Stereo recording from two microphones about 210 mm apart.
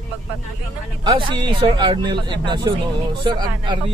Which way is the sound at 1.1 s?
25° right (ahead or behind).